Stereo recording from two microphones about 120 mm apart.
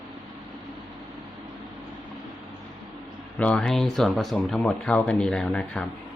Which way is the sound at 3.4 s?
10° left (ahead or behind).